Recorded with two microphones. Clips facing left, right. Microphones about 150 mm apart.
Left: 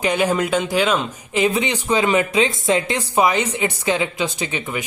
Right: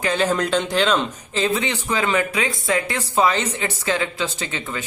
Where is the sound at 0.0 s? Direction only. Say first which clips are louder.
Left 2 dB; 15° left (ahead or behind).